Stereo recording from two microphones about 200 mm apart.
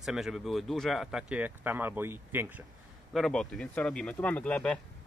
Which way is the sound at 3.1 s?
5° left (ahead or behind).